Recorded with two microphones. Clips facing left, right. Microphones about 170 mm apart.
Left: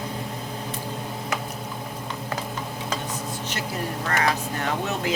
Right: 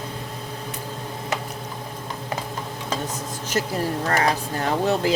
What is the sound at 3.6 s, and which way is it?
Speech, 40° right (ahead or behind).